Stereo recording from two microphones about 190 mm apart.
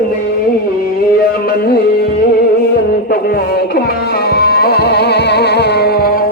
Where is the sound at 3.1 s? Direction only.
55° left (ahead or behind).